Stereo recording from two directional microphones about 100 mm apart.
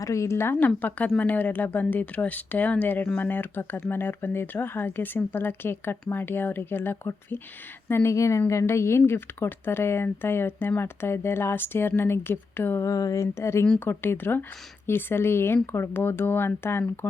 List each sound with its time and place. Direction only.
0.0 s speech: 30° left (ahead or behind)
12.9 s speech: 35° left (ahead or behind)